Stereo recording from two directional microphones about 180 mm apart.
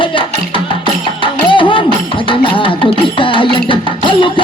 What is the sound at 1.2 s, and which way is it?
Music, 25° left (ahead or behind).